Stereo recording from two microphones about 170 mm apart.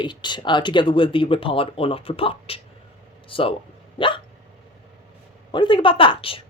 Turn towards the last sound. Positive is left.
turn(degrees=30)  # may be behind; listen again after turning